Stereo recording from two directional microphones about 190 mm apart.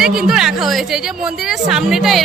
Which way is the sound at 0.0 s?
5° right (ahead or behind).